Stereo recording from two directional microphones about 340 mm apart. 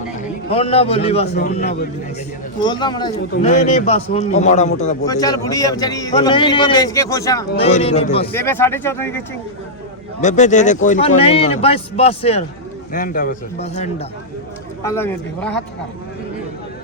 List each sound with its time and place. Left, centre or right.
0.2 s a man's voice: centre
2.6 s a man's voice: centre
8.3 s a man's voice: centre
10.2 s a man's voice: left
14.8 s a man's voice: centre